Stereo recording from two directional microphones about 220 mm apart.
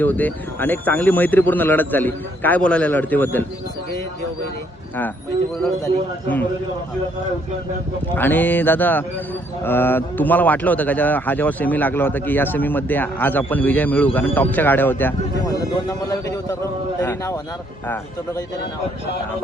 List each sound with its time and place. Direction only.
0.0 s a man's voice: 5° left (ahead or behind)
8.1 s a man's voice: 10° left (ahead or behind)